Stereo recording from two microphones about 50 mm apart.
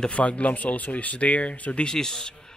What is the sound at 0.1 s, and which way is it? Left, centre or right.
Speech, left.